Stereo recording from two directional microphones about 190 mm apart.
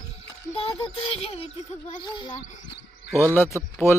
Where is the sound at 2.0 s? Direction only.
25° left (ahead or behind).